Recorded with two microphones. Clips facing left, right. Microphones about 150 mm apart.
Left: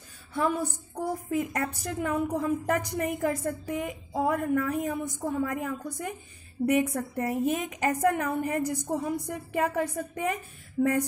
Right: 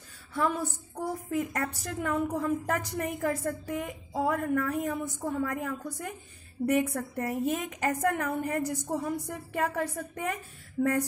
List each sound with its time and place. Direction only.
0.3 s a woman's voice: 15° left (ahead or behind)